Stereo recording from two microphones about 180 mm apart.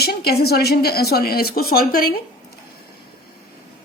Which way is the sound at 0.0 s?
60° left (ahead or behind).